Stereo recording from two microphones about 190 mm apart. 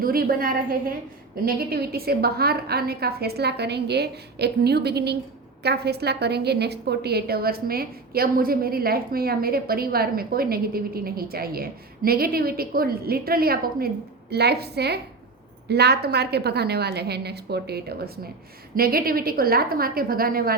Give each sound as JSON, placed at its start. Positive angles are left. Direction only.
{"t": 0.0, "sound": "a woman's voice", "side_deg": -50}